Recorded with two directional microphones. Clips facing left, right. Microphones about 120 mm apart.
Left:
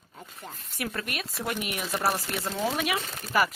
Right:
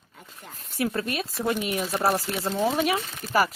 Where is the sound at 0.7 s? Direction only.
30° right (ahead or behind).